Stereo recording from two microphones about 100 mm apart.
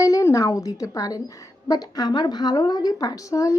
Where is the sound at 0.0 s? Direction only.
35° left (ahead or behind).